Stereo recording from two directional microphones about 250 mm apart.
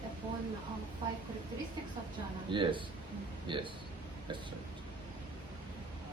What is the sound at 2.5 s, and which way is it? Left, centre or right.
Speech, centre.